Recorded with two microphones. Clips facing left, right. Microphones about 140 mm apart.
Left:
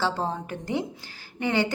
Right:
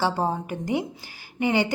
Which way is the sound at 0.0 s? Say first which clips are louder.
Right 3 dB; 10° right (ahead or behind).